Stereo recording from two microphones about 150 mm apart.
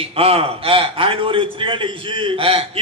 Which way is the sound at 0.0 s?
40° right (ahead or behind).